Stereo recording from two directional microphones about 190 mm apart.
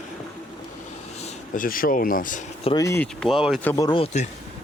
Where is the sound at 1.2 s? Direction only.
40° left (ahead or behind).